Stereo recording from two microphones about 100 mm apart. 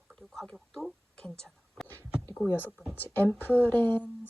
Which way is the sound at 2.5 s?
20° left (ahead or behind).